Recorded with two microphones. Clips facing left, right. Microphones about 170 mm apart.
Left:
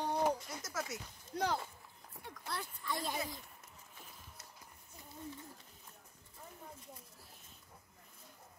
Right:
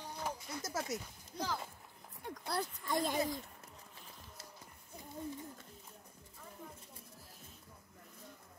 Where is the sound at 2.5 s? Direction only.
40° right (ahead or behind).